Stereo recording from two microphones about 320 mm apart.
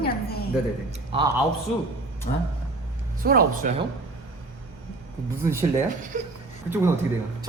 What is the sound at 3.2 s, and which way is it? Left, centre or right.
Speech, right.